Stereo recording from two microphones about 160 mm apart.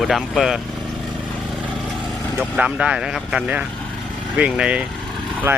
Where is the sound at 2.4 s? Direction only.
5° right (ahead or behind).